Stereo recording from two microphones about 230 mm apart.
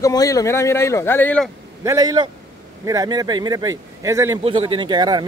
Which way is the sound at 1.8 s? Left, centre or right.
Centre.